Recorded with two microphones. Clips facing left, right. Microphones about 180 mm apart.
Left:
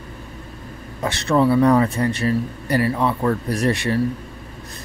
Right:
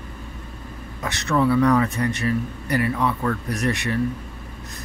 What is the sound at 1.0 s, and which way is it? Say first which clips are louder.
A man's voice: left 4 dB; 30° left (ahead or behind).